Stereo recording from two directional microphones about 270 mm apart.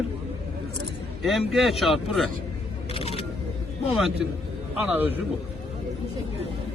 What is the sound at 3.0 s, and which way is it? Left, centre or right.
Single-lens reflex camera, centre.